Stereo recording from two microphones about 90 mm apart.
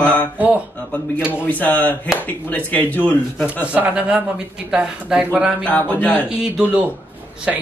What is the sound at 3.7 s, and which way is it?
Speech, 15° right (ahead or behind).